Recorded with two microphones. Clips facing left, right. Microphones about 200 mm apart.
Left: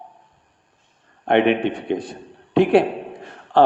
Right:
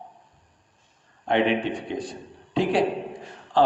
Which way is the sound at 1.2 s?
60° left (ahead or behind).